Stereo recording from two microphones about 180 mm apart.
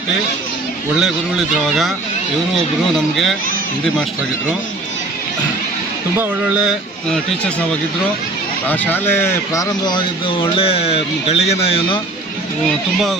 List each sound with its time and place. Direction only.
1.6 s speech: centre (ahead or behind)
2.9 s speech: centre (ahead or behind)
6.1 s speech: 5° right (ahead or behind)
8.6 s speech: 10° left (ahead or behind); by 11.9 s 35° left (ahead or behind)